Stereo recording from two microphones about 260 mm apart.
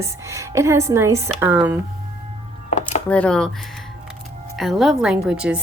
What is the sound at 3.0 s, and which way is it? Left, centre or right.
Speech, centre.